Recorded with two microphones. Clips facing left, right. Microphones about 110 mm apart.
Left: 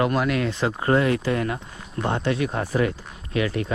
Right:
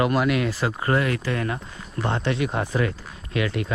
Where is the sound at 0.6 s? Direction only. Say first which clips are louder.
Left 6 dB; 25° left (ahead or behind).